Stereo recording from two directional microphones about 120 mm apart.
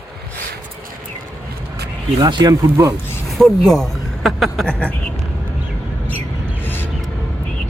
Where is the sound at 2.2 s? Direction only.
35° right (ahead or behind).